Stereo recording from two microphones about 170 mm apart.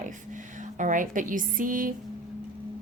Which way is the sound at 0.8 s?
50° right (ahead or behind).